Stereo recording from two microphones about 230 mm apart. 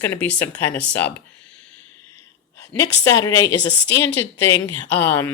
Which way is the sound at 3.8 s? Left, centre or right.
Left.